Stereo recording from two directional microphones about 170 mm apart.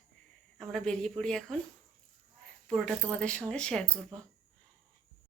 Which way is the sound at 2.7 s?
5° left (ahead or behind).